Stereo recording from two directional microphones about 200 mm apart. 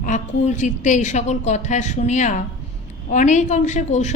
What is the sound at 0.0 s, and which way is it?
A woman's voice, 40° left (ahead or behind).